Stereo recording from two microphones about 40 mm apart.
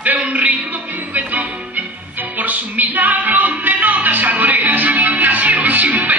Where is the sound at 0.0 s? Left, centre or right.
Right.